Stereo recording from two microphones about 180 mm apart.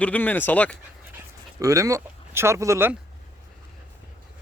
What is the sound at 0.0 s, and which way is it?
Speech, 10° left (ahead or behind).